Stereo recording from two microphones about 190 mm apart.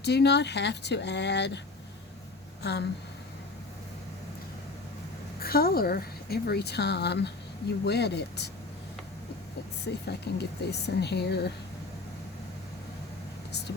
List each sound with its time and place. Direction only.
0.0 s speech: 60° left (ahead or behind)
5.4 s a woman's voice: 55° left (ahead or behind)
9.8 s speech: 60° left (ahead or behind)